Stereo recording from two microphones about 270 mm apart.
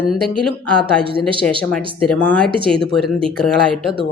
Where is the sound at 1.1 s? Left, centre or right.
Centre.